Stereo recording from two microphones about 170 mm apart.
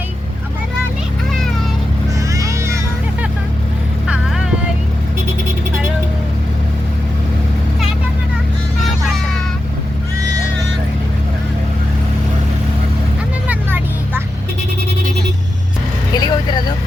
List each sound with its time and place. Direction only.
2.3 s vehicle: 20° right (ahead or behind)
4.0 s vehicle: 5° right (ahead or behind)
8.8 s music: centre (ahead or behind)
13.5 s vehicle: 10° right (ahead or behind)
16.1 s vehicle: 25° left (ahead or behind)